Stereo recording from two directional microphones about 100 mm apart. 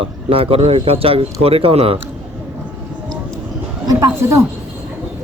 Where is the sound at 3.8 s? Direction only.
30° right (ahead or behind).